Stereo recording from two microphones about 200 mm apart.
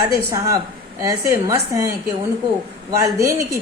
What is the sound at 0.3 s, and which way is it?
A woman's voice, 15° right (ahead or behind).